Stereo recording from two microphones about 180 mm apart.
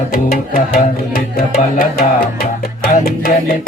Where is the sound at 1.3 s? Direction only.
55° left (ahead or behind).